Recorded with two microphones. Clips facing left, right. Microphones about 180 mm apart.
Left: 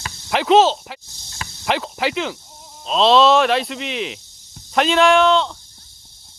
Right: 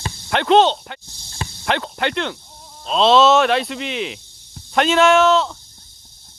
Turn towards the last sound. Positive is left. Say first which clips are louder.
# even
turn(degrees=0)  # may be behind; listen again after turning